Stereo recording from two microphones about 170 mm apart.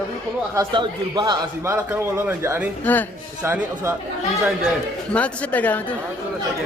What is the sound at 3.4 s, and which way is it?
Speech, 15° right (ahead or behind).